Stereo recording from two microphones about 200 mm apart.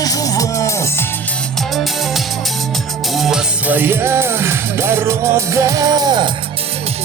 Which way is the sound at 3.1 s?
Centre (ahead or behind).